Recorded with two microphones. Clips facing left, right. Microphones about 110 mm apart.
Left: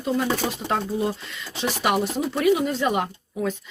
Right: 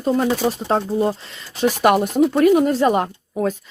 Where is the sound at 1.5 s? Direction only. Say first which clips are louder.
Right 7 dB; 45° right (ahead or behind).